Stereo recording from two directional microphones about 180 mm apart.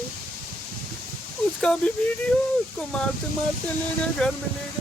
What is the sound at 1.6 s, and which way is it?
Speech, 5° left (ahead or behind).